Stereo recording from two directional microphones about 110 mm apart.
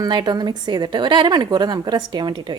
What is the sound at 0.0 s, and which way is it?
A woman's voice, 40° right (ahead or behind).